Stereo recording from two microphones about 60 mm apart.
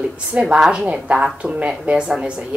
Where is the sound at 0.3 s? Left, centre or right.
Centre.